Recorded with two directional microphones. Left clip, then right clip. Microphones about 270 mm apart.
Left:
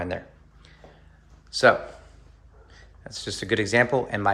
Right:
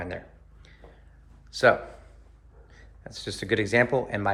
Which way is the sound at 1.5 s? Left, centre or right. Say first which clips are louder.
Left 2 dB; centre.